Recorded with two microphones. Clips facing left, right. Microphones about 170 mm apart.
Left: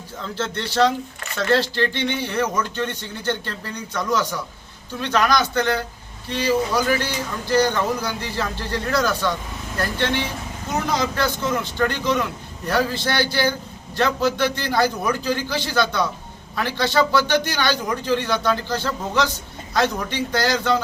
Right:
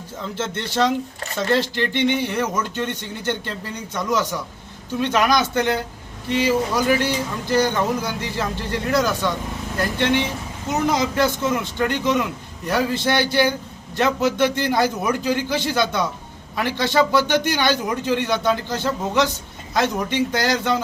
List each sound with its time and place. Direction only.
0.3 s speech: 20° right (ahead or behind)